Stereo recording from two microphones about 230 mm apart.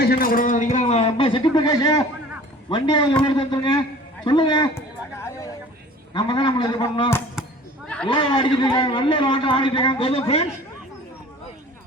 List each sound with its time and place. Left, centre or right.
0.0 s a man's voice: left; by 4.8 s centre
6.1 s a man's voice: left
7.4 s a sound: centre
8.0 s a man's voice: left